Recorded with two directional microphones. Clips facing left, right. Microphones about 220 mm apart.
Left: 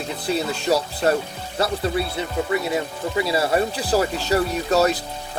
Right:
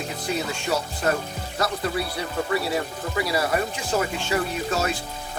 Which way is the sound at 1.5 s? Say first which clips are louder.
Left 4 dB; 30° left (ahead or behind).